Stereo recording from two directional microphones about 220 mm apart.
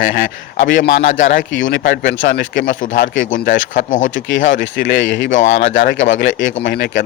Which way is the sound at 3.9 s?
35° left (ahead or behind).